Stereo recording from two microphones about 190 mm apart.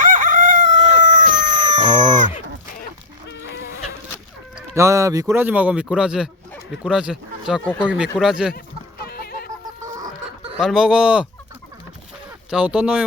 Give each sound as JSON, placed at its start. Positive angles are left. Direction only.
{"t": 0.0, "sound": "chicken", "side_deg": -45}
{"t": 4.7, "sound": "speech", "side_deg": -15}
{"t": 9.0, "sound": "chicken", "side_deg": 55}
{"t": 10.6, "sound": "speech", "side_deg": 0}
{"t": 12.5, "sound": "speech", "side_deg": -5}